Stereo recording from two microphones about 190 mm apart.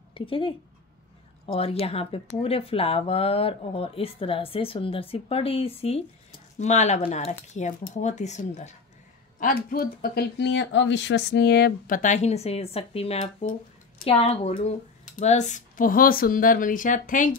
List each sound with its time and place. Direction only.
0.1 s a woman's voice: 30° left (ahead or behind)
9.4 s speech: 50° left (ahead or behind)